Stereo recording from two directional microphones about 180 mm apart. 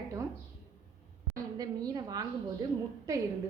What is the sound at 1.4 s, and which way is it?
Speech, 20° right (ahead or behind).